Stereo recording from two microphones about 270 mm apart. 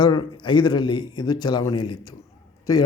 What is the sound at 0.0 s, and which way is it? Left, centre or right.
A man's voice, centre.